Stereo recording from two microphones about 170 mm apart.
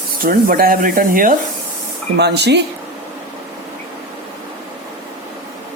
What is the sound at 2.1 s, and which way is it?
Speech, 80° right.